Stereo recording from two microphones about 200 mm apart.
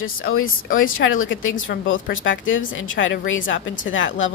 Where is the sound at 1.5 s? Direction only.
40° left (ahead or behind).